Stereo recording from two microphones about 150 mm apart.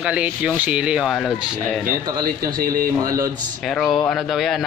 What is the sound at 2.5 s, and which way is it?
Speech, 70° right (ahead or behind).